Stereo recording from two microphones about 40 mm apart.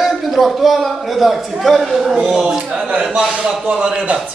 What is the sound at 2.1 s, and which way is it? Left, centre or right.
Speech, centre.